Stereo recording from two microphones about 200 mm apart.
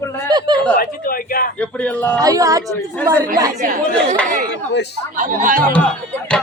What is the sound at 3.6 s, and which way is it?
Speech, 35° right (ahead or behind).